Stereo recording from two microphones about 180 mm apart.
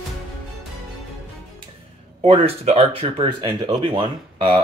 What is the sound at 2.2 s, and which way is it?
Speech, 30° right (ahead or behind).